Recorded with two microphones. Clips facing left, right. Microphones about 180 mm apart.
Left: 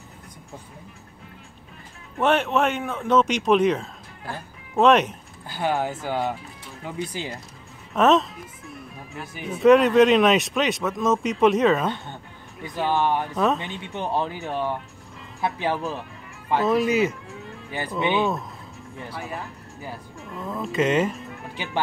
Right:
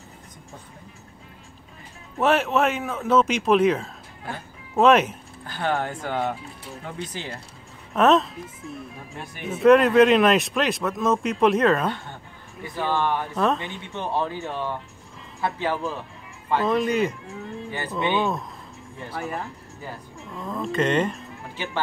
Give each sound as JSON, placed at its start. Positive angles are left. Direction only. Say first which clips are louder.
{"t": 2.1, "sound": "speech", "louder": "even", "side_deg": 0}
{"t": 5.5, "sound": "speech", "louder": "left 1 dB", "side_deg": 10}
{"t": 7.9, "sound": "speech", "louder": "even", "side_deg": 0}
{"t": 12.6, "sound": "speech", "louder": "left 2 dB", "side_deg": 20}
{"t": 20.3, "sound": "speech", "louder": "even", "side_deg": 5}